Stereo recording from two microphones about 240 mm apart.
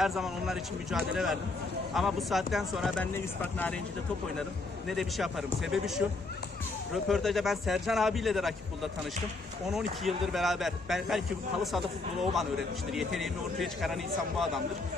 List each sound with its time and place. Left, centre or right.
0.0 s a man's voice: centre
4.4 s a man's voice: centre
7.1 s a man's voice: centre
9.7 s a man's voice: centre
12.9 s a man's voice: centre